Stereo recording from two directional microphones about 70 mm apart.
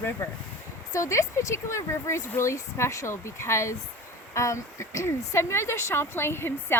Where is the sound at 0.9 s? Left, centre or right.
Left.